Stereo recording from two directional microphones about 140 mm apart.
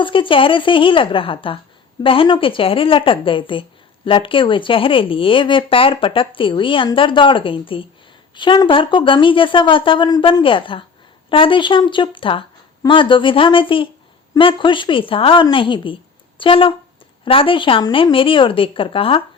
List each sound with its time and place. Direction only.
0.0 s speech: 40° left (ahead or behind)